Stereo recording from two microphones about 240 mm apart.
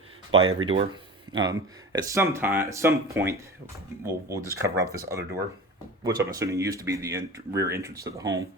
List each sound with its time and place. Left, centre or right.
0.3 s speech: right
1.3 s speech: centre